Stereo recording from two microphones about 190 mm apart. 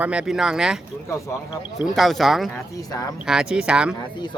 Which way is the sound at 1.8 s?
Centre (ahead or behind).